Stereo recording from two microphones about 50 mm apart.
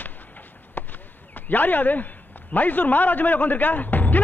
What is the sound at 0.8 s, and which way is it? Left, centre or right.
Basketball bounce, left.